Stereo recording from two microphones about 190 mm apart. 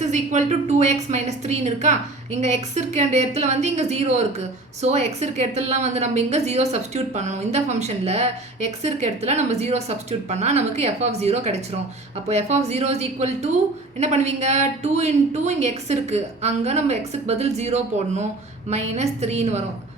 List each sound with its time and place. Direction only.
0.0 s a woman's voice: 40° right (ahead or behind)